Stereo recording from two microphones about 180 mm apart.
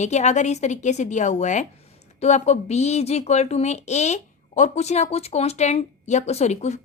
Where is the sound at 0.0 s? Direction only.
40° left (ahead or behind).